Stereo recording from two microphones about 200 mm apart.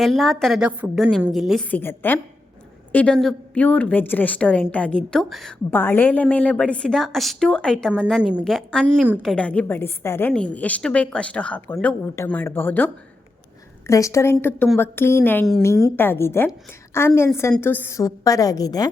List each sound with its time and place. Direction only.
0.0 s a woman's voice: centre (ahead or behind); by 18.9 s 20° left (ahead or behind)